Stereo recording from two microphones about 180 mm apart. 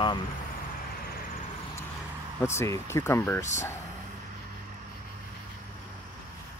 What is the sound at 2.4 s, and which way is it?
Speech, 15° left (ahead or behind).